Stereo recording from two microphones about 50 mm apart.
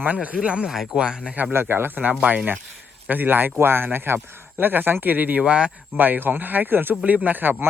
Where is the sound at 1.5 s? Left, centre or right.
Right.